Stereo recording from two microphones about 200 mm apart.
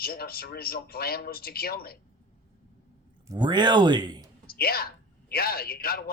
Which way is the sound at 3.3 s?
20° right (ahead or behind).